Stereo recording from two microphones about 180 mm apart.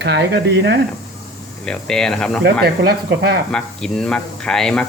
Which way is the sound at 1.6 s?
5° left (ahead or behind).